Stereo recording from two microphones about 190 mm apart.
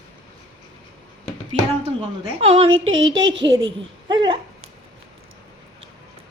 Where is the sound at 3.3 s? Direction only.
75° right (ahead or behind).